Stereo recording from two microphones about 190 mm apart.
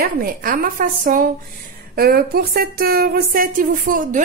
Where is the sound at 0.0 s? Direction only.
50° right (ahead or behind).